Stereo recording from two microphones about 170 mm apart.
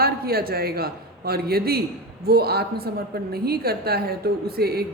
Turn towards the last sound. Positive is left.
turn(degrees=-65)  # may be behind; listen again after turning